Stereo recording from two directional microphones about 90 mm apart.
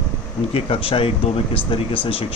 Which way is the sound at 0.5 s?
90° left.